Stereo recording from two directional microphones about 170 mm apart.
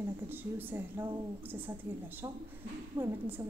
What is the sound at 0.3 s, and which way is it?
Speech, 10° right (ahead or behind).